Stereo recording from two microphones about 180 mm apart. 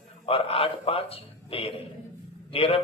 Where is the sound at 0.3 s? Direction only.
30° left (ahead or behind).